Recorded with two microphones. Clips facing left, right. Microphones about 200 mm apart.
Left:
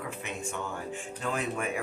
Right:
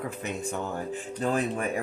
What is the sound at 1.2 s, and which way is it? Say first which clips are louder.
Speech: right 5 dB; 35° right (ahead or behind).